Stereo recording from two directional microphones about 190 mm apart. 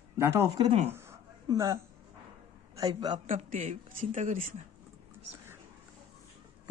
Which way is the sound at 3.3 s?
40° right (ahead or behind).